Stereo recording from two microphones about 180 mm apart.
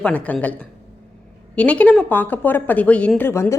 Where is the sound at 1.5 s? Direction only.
5° left (ahead or behind).